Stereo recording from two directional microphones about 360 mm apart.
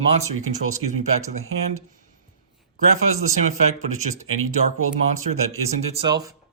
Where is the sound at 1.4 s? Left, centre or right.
Right.